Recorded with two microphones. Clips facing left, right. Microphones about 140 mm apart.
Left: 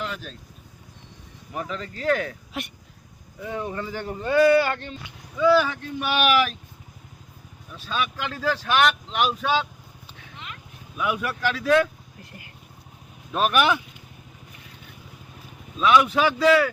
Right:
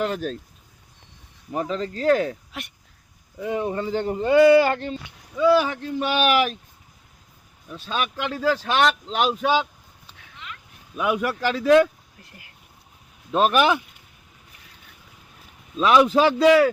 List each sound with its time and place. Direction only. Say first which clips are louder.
0.0 s speech: right 8 dB; 45° right (ahead or behind)
1.5 s speech: right 6 dB; 30° right (ahead or behind)
2.5 s speech: left 4 dB; centre (ahead or behind)
3.4 s speech: right 5 dB; 20° right (ahead or behind)
5.4 s speech: right 1 dB; 15° right (ahead or behind)
7.9 s speech: right 1 dB; 20° right (ahead or behind)
8.6 s speech: right 1 dB; 30° right (ahead or behind)
9.4 s speech: right 3 dB; 15° right (ahead or behind)
10.9 s speech: right 4 dB; 30° right (ahead or behind)
13.3 s speech: right 3 dB; 25° right (ahead or behind)
15.8 s speech: right 2 dB; 35° right (ahead or behind)
16.4 s speech: right 3 dB; 20° right (ahead or behind)